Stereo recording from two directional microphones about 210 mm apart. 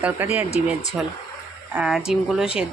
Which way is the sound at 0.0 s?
10° right (ahead or behind).